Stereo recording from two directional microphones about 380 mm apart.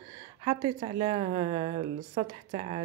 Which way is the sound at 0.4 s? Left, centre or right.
Centre.